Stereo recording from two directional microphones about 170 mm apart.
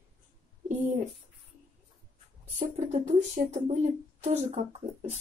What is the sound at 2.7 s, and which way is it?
Speech, 45° right (ahead or behind).